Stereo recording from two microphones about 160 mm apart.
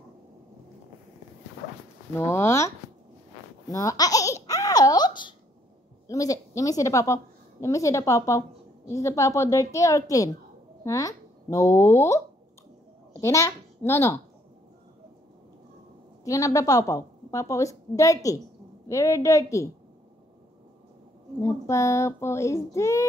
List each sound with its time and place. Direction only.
2.1 s speech: 15° left (ahead or behind)
3.7 s a woman's voice: 20° left (ahead or behind)
13.2 s speech: 15° left (ahead or behind)
16.3 s a woman's voice: 20° left (ahead or behind)
21.4 s speech: 20° left (ahead or behind)